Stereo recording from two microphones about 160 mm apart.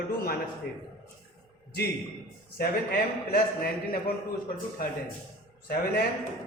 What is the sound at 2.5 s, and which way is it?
Speech, 70° left (ahead or behind).